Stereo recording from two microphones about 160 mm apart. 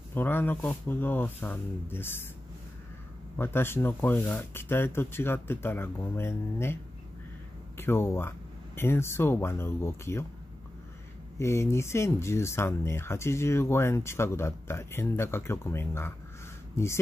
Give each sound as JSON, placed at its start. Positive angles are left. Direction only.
{"t": 0.1, "sound": "speech", "side_deg": 15}
{"t": 3.3, "sound": "speech", "side_deg": 15}
{"t": 11.3, "sound": "speech", "side_deg": 15}